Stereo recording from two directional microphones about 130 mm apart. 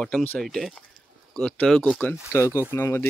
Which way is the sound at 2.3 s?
20° left (ahead or behind).